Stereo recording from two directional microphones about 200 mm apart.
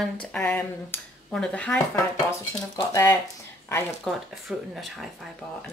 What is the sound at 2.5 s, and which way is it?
Speech, 15° left (ahead or behind).